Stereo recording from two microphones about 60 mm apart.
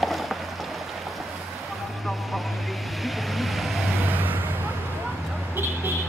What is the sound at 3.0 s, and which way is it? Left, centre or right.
Vehicle, centre.